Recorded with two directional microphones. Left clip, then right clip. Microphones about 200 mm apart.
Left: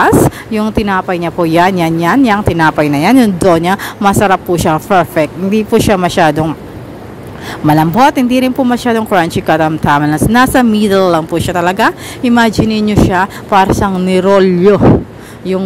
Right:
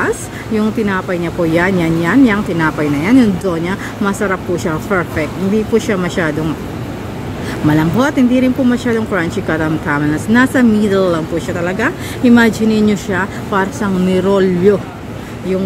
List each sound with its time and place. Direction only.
0.6 s speech: 35° left (ahead or behind)
7.7 s speech: 35° left (ahead or behind)